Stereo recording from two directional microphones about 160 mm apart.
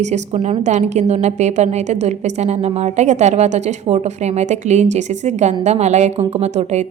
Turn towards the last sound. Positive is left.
turn(degrees=-45)  # may be behind; listen again after turning